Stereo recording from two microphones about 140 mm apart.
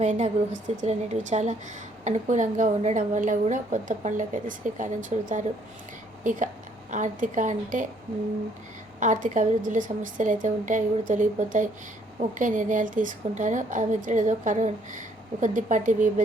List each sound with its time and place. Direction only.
0.0 s a woman's voice: 55° right (ahead or behind)
9.0 s a woman's voice: 65° right (ahead or behind)